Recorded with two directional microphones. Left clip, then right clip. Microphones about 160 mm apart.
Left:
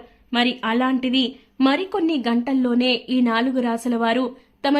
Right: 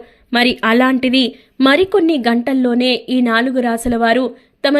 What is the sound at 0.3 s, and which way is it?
A woman's voice, 40° right (ahead or behind).